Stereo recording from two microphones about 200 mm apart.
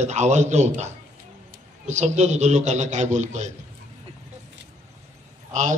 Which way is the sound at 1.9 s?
35° right (ahead or behind).